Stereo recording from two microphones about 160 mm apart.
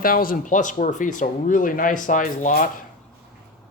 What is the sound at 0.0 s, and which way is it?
Speech, 60° left (ahead or behind).